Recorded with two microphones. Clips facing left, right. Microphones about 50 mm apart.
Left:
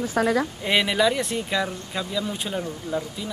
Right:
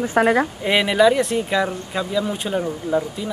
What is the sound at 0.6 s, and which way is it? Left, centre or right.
Speech, centre.